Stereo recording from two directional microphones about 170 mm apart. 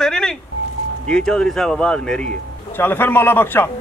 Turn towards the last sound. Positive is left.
turn(degrees=10)  # may be behind; listen again after turning